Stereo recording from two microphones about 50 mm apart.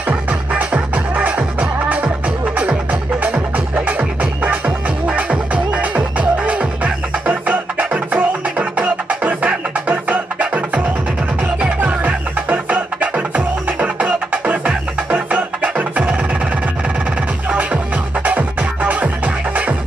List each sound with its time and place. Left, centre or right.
0.1 s music: right
11.8 s music: right
18.2 s music: right